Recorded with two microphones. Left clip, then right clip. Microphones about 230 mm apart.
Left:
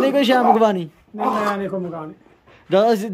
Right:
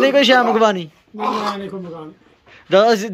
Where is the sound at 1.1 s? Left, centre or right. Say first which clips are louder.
Even; left.